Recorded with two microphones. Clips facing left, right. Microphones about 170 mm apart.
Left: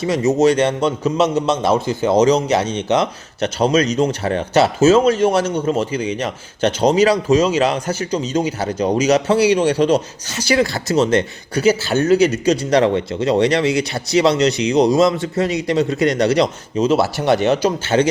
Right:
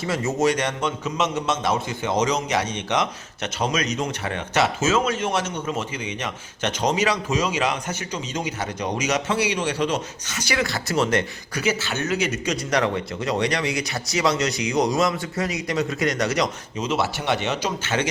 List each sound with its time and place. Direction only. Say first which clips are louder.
0.0 s a man's voice: left 7 dB; 20° left (ahead or behind)